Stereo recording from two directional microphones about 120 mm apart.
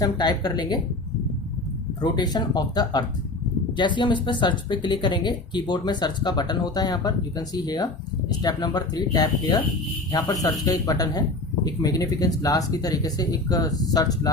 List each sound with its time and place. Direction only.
0.0 s speech: 35° left (ahead or behind)
2.0 s speech: 35° left (ahead or behind)